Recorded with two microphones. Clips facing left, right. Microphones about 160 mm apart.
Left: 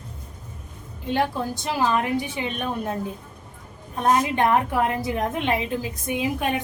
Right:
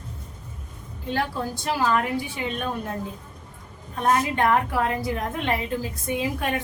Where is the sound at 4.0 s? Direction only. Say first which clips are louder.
Left 2 dB; 20° left (ahead or behind).